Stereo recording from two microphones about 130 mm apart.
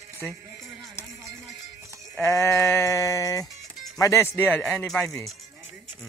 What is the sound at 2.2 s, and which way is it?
Sheep, 25° left (ahead or behind).